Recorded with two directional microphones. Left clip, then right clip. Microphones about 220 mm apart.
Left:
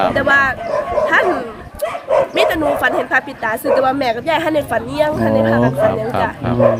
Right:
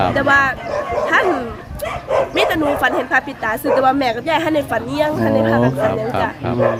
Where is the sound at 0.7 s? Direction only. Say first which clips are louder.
Left 3 dB; 15° right (ahead or behind).